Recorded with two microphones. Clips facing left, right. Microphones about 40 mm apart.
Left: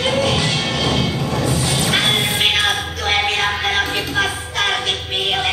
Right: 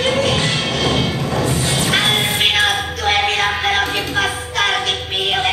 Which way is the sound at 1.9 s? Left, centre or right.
Centre.